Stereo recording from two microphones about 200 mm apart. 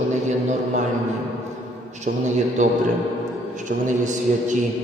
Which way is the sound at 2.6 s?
40° right (ahead or behind).